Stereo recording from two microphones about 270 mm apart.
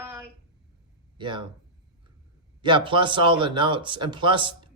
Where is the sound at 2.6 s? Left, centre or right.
Centre.